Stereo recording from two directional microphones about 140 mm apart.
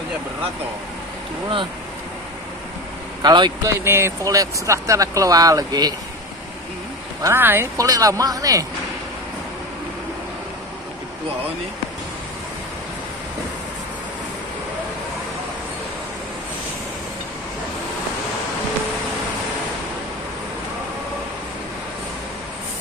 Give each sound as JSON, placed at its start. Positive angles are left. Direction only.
{"t": 3.2, "sound": "speech", "side_deg": -30}
{"t": 3.8, "sound": "speech", "side_deg": -15}
{"t": 7.2, "sound": "speech", "side_deg": -20}